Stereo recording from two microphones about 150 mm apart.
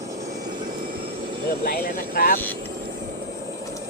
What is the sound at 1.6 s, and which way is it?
Speech, 85° left.